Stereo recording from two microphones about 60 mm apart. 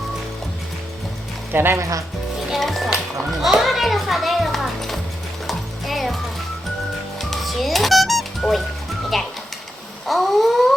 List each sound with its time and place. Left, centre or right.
1.5 s speech: right
1.8 s speech: right
2.5 s music: centre
7.2 s music: centre
9.1 s a sound: centre